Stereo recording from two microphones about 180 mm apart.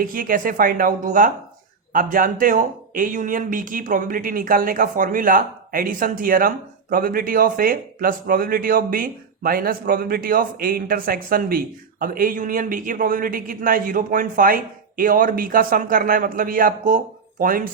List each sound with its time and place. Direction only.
0.0 s a man's voice: 50° right (ahead or behind)